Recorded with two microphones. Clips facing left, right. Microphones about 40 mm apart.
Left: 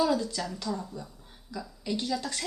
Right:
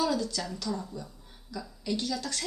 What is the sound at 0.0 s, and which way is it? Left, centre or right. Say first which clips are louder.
A woman's voice: left 2 dB; centre.